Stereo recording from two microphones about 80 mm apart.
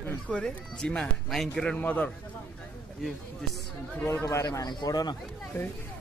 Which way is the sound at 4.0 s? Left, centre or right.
Left.